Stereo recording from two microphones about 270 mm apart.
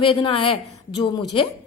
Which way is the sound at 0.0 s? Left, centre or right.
Centre.